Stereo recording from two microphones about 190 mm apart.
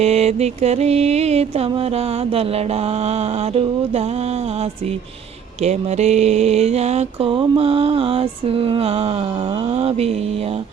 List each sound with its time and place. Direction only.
0.0 s mantra: 35° right (ahead or behind)
5.6 s mantra: 35° right (ahead or behind)